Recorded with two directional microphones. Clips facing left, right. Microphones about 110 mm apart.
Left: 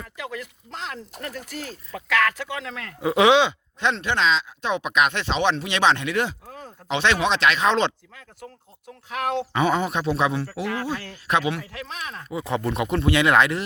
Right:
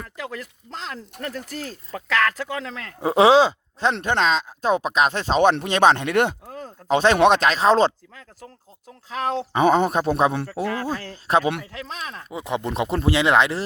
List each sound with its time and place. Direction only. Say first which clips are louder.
0.2 s speech: even; 35° right (ahead or behind)
4.0 s speech: right 2 dB; 45° right (ahead or behind)
6.5 s a sound: right 6 dB; 40° right (ahead or behind)
7.2 s speech: right 7 dB; 55° right (ahead or behind)
7.4 s speech: right 3 dB; 35° right (ahead or behind)
9.0 s speech: right 1 dB; 30° right (ahead or behind)
9.6 s speech: right 7 dB; 50° right (ahead or behind); by 13.7 s 25° right (ahead or behind)